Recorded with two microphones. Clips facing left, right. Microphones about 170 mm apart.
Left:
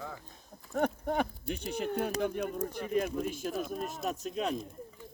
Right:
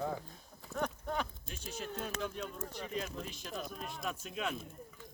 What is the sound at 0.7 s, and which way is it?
Speech, 55° left (ahead or behind).